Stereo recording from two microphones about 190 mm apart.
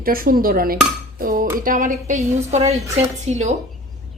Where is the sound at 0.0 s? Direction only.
50° right (ahead or behind).